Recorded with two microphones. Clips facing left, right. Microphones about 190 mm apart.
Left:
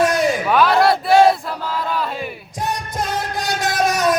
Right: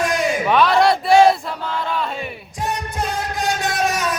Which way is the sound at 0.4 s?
Centre (ahead or behind).